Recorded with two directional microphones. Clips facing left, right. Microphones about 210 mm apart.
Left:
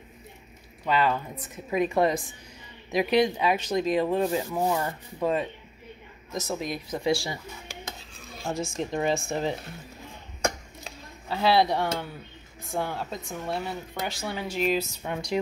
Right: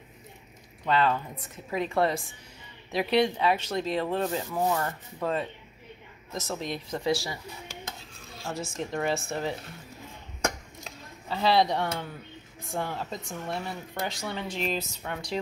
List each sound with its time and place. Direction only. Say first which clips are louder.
0.8 s speech: even; 10° left (ahead or behind)
7.0 s speech: left 2 dB; 20° left (ahead or behind)
8.7 s speech: left 2 dB; 15° left (ahead or behind)
10.8 s a sound: left 1 dB; 5° left (ahead or behind)
12.7 s speech: left 2 dB; centre (ahead or behind)